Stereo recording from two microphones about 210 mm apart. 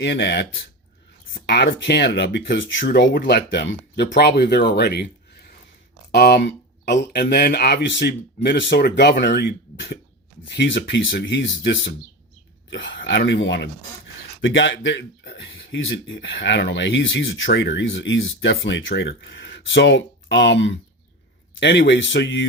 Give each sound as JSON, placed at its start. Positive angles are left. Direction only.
{"t": 0.0, "sound": "speech", "side_deg": 55}
{"t": 2.8, "sound": "speech", "side_deg": 45}
{"t": 6.1, "sound": "speech", "side_deg": 50}